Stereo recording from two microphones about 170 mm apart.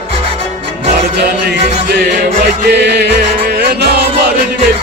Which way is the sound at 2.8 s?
80° right.